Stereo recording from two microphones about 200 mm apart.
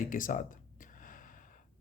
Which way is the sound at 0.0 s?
40° left (ahead or behind).